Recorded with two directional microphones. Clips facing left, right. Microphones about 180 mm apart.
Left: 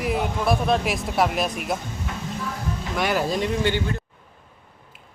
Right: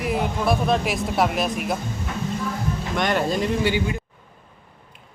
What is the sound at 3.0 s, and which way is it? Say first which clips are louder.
Speech: right 1 dB; 5° left (ahead or behind).